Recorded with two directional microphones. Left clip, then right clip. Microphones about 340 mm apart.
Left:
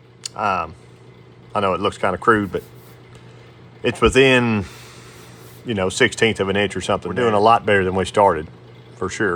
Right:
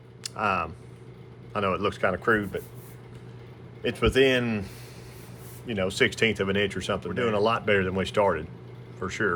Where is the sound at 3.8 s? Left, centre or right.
Centre.